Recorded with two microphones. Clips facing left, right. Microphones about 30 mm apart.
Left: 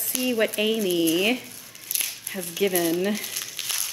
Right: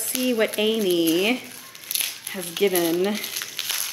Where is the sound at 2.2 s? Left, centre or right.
Right.